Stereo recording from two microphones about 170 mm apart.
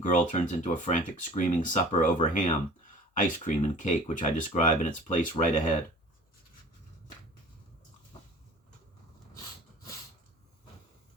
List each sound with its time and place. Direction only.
0.0 s speech: 50° left (ahead or behind)